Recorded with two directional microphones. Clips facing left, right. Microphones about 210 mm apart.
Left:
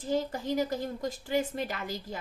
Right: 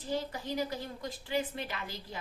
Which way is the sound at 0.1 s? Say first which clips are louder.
Left 5 dB; 45° left (ahead or behind).